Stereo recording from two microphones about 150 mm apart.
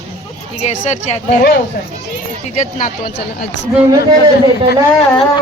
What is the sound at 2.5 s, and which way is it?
Speech, 60° left (ahead or behind).